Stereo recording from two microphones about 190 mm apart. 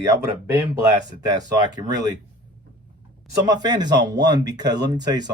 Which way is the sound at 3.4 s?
20° right (ahead or behind).